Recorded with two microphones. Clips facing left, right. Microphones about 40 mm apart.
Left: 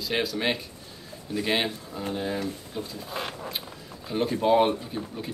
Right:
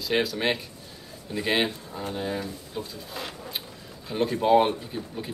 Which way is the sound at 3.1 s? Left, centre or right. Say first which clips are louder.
Left 4 dB; left.